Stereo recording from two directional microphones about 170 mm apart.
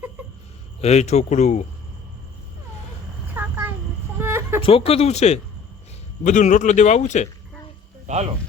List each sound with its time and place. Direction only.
0.8 s a man's voice: 40° left (ahead or behind)
3.3 s a sound: 10° right (ahead or behind)
4.2 s chicken: 15° right (ahead or behind)
4.6 s a man's voice: 35° left (ahead or behind)
8.0 s speech: 40° right (ahead or behind)